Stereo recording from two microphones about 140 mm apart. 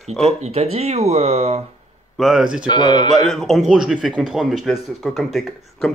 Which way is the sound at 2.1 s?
Centre (ahead or behind).